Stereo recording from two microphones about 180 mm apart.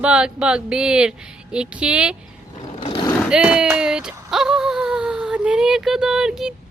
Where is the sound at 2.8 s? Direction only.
30° left (ahead or behind).